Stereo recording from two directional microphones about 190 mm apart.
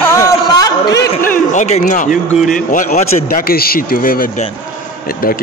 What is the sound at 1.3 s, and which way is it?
Speech, 40° left (ahead or behind).